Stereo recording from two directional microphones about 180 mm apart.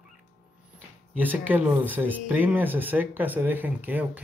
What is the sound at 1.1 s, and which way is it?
Speech, 10° right (ahead or behind).